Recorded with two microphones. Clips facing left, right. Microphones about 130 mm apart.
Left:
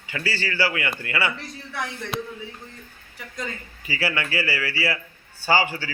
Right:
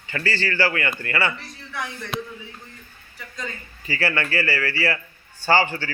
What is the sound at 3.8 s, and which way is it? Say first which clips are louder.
A man's voice: right 2 dB; 10° left (ahead or behind).